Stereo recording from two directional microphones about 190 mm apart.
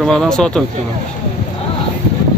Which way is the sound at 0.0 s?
Centre (ahead or behind).